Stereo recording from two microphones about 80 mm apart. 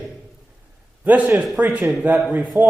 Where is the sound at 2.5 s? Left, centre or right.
Left.